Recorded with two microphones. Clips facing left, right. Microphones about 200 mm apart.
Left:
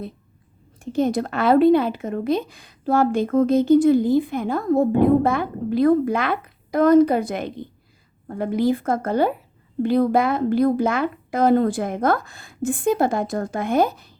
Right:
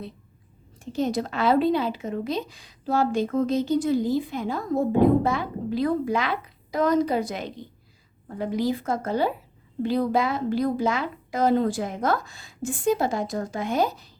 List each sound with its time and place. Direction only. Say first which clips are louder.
0.8 s a woman's voice: left 5 dB; 55° left (ahead or behind)